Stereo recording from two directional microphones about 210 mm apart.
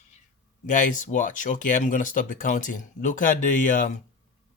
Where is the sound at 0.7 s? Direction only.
40° left (ahead or behind).